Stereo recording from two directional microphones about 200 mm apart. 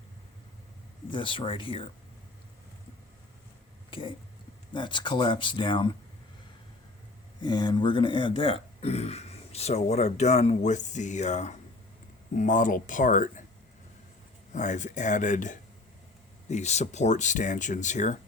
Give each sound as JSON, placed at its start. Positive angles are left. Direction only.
{"t": 1.1, "sound": "speech", "side_deg": 25}
{"t": 4.7, "sound": "speech", "side_deg": 25}
{"t": 7.4, "sound": "speech", "side_deg": 20}
{"t": 14.5, "sound": "speech", "side_deg": 35}